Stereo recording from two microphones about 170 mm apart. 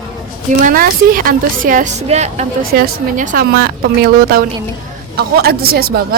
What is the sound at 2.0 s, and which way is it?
Speech, 40° right (ahead or behind).